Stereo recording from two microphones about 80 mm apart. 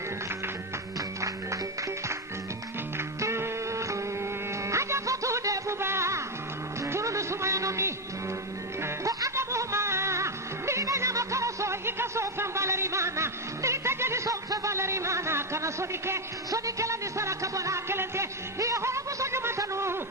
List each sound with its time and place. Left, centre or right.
3.2 s music: right